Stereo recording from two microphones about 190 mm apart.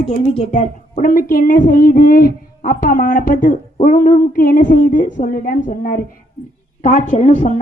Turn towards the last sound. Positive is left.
turn(degrees=35)  # may be behind; listen again after turning